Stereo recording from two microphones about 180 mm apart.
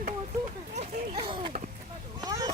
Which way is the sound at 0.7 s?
30° right (ahead or behind).